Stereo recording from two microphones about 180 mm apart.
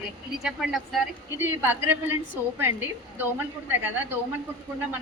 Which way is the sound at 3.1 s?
10° right (ahead or behind).